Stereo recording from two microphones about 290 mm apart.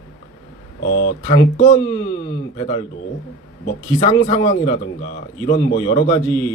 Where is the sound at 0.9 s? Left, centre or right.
Left.